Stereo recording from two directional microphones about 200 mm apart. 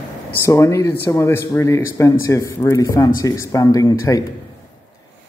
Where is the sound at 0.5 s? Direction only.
15° left (ahead or behind).